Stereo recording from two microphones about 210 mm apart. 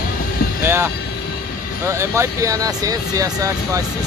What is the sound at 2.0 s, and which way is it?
Speech, 15° right (ahead or behind).